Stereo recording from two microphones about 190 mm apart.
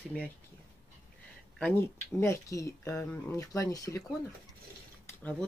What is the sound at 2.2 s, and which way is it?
Speech, 15° left (ahead or behind).